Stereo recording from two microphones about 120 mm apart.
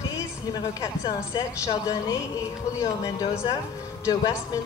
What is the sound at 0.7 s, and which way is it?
A woman's voice, 30° left (ahead or behind).